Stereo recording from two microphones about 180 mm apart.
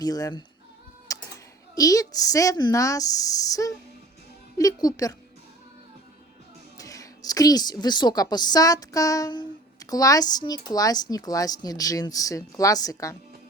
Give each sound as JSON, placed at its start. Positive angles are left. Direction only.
{"t": 0.0, "sound": "speech", "side_deg": 20}
{"t": 1.1, "sound": "typing", "side_deg": 20}
{"t": 1.7, "sound": "speech", "side_deg": 20}
{"t": 6.7, "sound": "a woman's voice", "side_deg": 20}